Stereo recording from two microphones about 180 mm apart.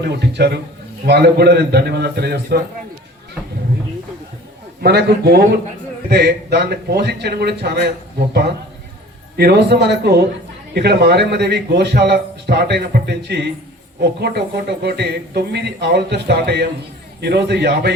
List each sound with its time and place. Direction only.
0.0 s a man's voice: 65° right (ahead or behind)
4.8 s a man's voice: 65° right (ahead or behind)